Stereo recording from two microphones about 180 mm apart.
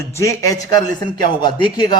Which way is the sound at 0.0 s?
15° left (ahead or behind).